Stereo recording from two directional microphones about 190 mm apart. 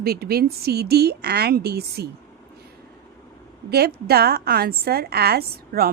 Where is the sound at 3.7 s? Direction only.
55° right (ahead or behind).